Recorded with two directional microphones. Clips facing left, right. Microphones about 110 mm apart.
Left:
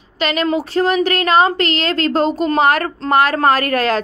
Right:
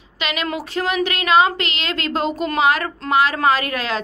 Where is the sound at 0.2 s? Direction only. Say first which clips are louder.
Left 7 dB; 40° left (ahead or behind).